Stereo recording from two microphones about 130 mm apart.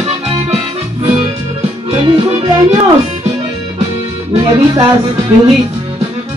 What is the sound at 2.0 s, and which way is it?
Music, 40° right (ahead or behind).